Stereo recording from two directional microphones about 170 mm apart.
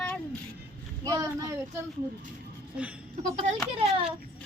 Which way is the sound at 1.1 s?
20° right (ahead or behind).